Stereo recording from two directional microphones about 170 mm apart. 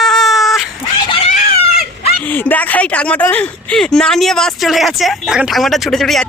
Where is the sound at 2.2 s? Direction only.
10° left (ahead or behind).